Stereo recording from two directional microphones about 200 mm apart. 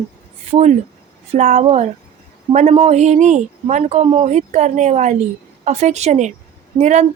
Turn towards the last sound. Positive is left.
turn(degrees=-35)  # may be behind; listen again after turning